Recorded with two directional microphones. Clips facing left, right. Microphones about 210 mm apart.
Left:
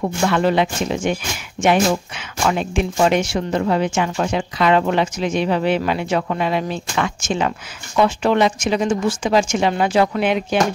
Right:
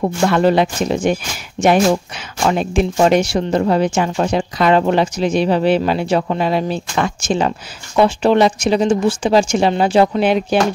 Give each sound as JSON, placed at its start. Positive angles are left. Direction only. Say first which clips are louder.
{"t": 0.0, "sound": "speech", "louder": "right 4 dB", "side_deg": -35}